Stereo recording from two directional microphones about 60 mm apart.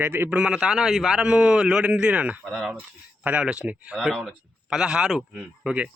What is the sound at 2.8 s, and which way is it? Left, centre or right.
Speech, right.